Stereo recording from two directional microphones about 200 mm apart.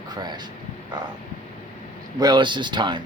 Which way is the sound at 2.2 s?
20° right (ahead or behind).